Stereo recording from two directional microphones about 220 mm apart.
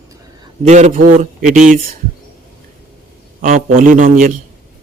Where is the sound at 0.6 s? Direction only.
30° right (ahead or behind).